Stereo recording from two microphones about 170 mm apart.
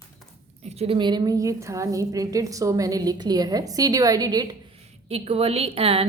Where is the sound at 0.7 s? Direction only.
35° right (ahead or behind).